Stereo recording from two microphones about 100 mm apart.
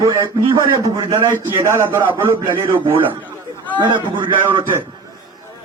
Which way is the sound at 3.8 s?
50° right (ahead or behind).